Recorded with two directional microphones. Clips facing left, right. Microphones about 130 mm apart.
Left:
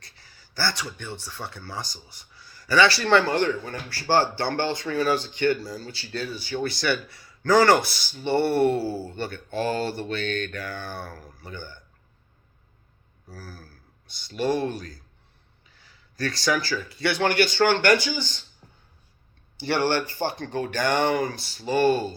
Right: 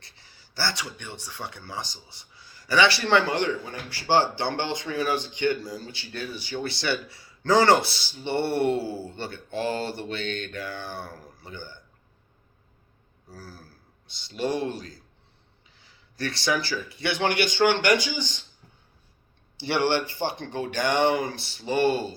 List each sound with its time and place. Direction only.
0.0 s a sound: 20° right (ahead or behind)
1.2 s a man's voice: 15° right (ahead or behind)
13.3 s a man's voice: 25° right (ahead or behind)
15.8 s a sound: 20° right (ahead or behind)
16.6 s a man's voice: 20° right (ahead or behind)
19.6 s a man's voice: 15° right (ahead or behind)